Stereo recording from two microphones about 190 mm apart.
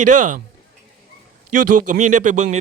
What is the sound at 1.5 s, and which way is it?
Speech, 45° right (ahead or behind).